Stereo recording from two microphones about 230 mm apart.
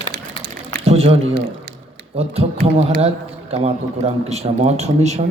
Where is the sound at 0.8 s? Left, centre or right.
Right.